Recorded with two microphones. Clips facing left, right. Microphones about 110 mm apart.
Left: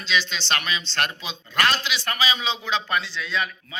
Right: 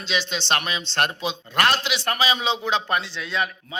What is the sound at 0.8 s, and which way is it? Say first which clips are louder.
A man's voice: right 3 dB; 60° right (ahead or behind).